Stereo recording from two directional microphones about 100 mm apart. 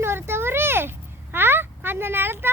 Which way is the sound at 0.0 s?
25° right (ahead or behind).